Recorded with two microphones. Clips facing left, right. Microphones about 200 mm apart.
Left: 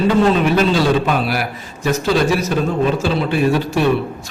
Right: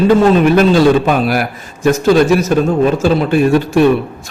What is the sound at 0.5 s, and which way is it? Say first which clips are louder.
A man's voice: right 6 dB; 50° right (ahead or behind).